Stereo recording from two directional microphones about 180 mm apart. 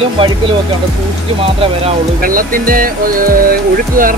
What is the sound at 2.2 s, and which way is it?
Speech, 50° right (ahead or behind).